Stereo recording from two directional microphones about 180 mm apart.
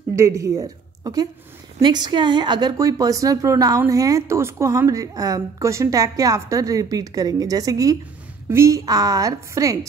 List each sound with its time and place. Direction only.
0.1 s a woman's voice: 15° right (ahead or behind)